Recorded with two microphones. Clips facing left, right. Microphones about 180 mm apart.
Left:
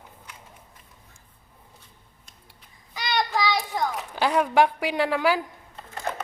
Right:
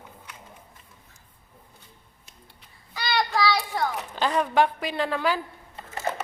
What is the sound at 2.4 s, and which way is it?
Child singing, 15° left (ahead or behind).